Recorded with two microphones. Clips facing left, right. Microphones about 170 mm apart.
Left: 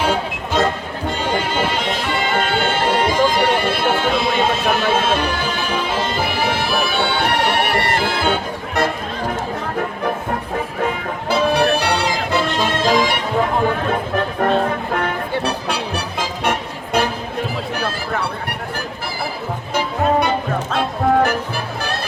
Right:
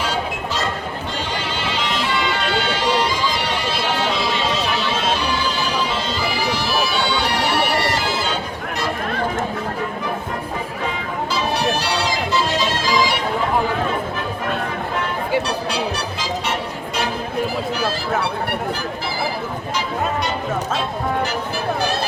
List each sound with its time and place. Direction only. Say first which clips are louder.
1.3 s music: left 8 dB; 50° left (ahead or behind)
11.3 s music: left 6 dB; 55° left (ahead or behind)
15.7 s music: even; 55° left (ahead or behind)
19.7 s music: left 6 dB; 55° left (ahead or behind)